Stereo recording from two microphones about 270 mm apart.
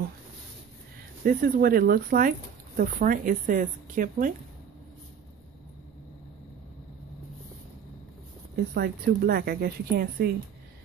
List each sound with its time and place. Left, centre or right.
1.2 s speech: right
8.7 s speech: right